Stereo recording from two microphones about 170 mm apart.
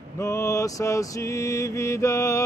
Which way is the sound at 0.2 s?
20° left (ahead or behind).